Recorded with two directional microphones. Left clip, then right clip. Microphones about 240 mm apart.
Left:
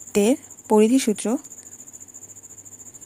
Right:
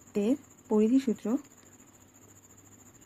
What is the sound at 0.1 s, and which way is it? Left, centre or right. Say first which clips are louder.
Speech: left 10 dB; left.